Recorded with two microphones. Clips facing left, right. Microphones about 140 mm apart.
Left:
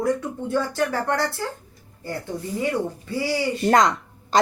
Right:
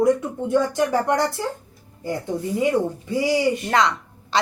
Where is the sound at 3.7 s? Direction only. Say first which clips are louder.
Left 2 dB; 45° left (ahead or behind).